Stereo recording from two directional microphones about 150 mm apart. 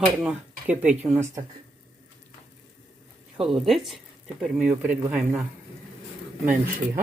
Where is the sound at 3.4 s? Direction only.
Centre (ahead or behind).